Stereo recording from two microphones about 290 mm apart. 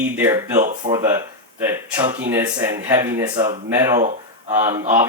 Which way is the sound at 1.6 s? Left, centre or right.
Centre.